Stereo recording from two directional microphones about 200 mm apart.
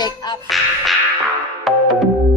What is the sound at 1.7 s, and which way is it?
Music, centre (ahead or behind).